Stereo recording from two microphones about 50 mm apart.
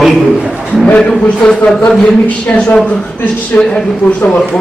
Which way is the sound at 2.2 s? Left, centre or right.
Left.